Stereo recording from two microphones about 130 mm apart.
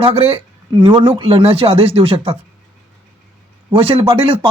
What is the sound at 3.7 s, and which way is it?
Speech, 45° right (ahead or behind).